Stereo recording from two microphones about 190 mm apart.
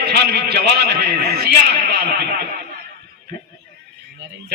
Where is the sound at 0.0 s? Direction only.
60° right (ahead or behind).